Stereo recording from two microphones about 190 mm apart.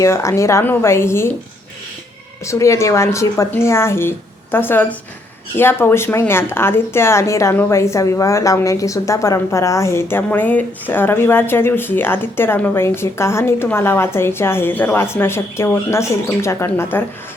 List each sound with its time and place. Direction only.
0.0 s speech: 15° left (ahead or behind)
2.4 s speech: 15° left (ahead or behind)